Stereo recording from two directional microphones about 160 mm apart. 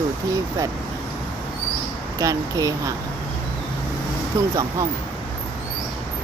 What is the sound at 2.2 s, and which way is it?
Speech, 20° right (ahead or behind).